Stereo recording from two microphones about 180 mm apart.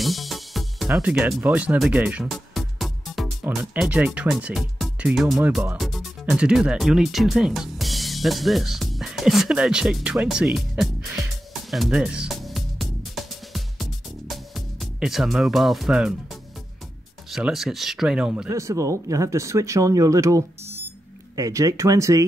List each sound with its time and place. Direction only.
0.0 s speech: centre (ahead or behind)
11.7 s music: centre (ahead or behind)
17.3 s speech: centre (ahead or behind)
18.5 s speech: 15° right (ahead or behind)